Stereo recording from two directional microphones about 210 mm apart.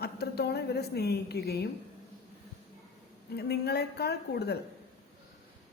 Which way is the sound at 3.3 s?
50° left (ahead or behind).